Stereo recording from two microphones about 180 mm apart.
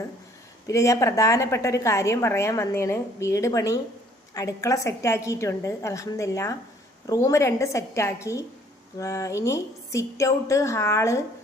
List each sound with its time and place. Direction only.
0.7 s a woman's voice: 15° left (ahead or behind)